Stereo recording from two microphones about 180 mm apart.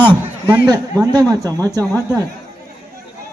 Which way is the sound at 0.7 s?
20° right (ahead or behind).